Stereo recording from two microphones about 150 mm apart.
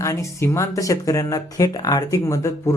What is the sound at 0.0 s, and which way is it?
Speech, 20° left (ahead or behind).